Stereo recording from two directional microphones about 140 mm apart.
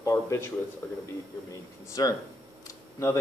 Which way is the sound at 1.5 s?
25° left (ahead or behind).